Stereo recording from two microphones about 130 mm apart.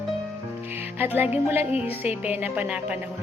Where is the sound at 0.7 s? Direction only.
15° right (ahead or behind).